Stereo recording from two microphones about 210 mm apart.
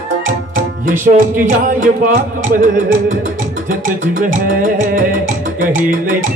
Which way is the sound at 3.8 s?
40° right (ahead or behind).